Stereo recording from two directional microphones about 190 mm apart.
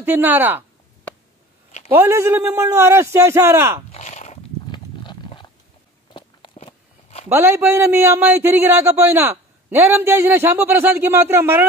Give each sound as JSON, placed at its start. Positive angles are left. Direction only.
{"t": 0.0, "sound": "speech", "side_deg": -10}
{"t": 1.9, "sound": "speech", "side_deg": -10}
{"t": 3.9, "sound": "a sound", "side_deg": 40}
{"t": 4.6, "sound": "horse", "side_deg": 25}
{"t": 6.1, "sound": "walk", "side_deg": 25}
{"t": 7.2, "sound": "speech", "side_deg": -10}